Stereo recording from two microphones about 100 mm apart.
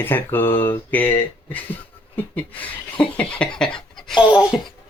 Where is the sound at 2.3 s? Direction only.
15° left (ahead or behind).